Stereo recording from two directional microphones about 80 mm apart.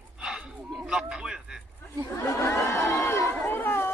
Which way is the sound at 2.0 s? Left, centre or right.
Left.